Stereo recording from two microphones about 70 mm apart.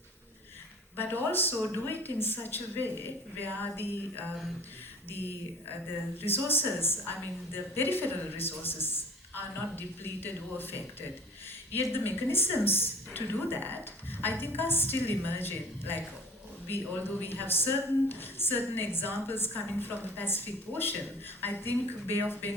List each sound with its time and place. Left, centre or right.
0.9 s speech: left
6.2 s speech: left
11.9 s a woman's voice: left